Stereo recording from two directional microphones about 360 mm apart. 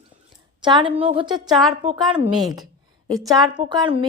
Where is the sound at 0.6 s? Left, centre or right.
Centre.